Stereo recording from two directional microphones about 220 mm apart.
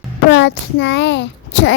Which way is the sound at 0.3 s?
55° left (ahead or behind).